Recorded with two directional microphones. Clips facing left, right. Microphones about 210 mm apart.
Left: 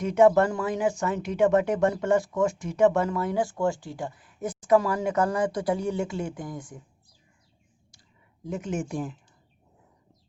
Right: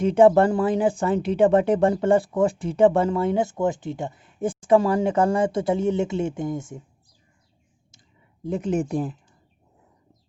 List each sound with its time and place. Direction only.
0.0 s speech: 30° right (ahead or behind)
8.4 s speech: 35° right (ahead or behind)